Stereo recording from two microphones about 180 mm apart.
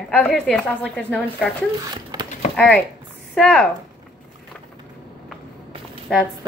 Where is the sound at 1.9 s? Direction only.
25° right (ahead or behind).